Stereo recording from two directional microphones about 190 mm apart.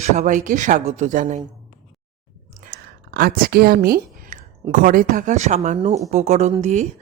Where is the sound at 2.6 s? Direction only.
50° right (ahead or behind).